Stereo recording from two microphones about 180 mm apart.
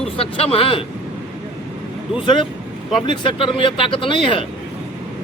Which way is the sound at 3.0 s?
30° left (ahead or behind).